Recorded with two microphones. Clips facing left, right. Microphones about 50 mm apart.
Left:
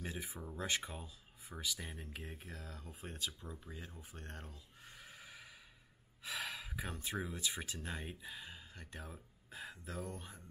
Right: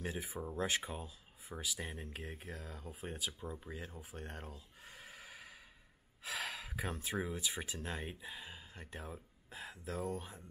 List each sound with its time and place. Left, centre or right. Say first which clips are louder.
0.0 s speech: right 4 dB; centre
3.3 s speech: right 5 dB; right
3.7 s speech: right 4 dB; centre
4.8 s neigh: right 2 dB; centre
6.2 s a sound: right 1 dB; centre
7.1 s speech: right 1 dB; centre